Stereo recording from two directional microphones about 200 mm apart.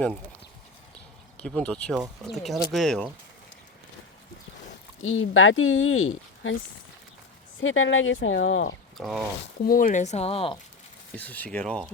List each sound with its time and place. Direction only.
1.4 s speech: 5° left (ahead or behind)
5.0 s speech: 80° left
7.6 s speech: 75° left (ahead or behind)
9.0 s speech: centre (ahead or behind)
9.6 s speech: 45° left (ahead or behind); by 10.6 s 25° left (ahead or behind)
11.1 s speech: 10° left (ahead or behind)